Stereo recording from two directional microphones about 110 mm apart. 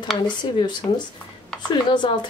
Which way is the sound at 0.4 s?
45° left (ahead or behind).